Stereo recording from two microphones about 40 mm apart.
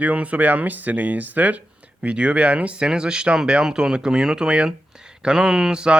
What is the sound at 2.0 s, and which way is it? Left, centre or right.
A man's voice, right.